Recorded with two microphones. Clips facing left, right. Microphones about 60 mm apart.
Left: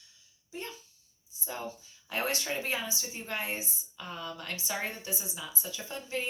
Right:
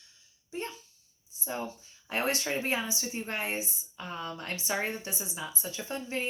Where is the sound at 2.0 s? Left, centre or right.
Right.